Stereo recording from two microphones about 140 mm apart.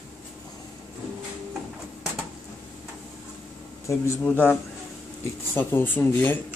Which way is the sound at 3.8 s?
20° left (ahead or behind).